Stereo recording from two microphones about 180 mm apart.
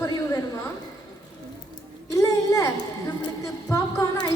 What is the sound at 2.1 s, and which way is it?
A woman's voice, 15° left (ahead or behind).